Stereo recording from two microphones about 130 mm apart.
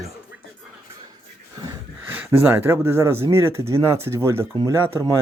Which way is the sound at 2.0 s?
15° right (ahead or behind).